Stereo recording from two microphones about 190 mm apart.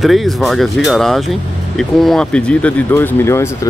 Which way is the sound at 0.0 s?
Centre (ahead or behind).